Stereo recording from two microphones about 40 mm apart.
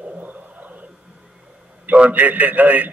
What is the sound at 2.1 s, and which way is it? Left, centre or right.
Speech, right.